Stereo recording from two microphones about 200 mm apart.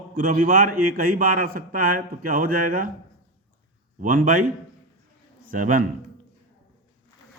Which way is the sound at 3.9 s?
45° right (ahead or behind).